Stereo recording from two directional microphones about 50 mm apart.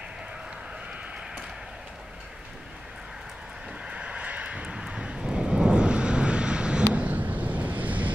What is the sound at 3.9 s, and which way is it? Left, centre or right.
Vehicle, right.